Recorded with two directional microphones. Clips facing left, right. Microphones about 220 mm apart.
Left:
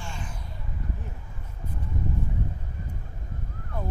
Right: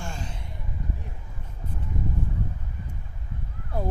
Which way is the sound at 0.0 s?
40° right (ahead or behind).